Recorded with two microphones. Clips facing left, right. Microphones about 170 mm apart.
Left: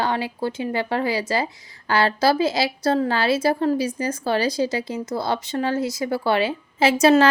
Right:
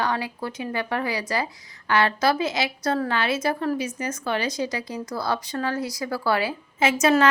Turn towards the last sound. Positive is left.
turn(degrees=30)  # may be behind; listen again after turning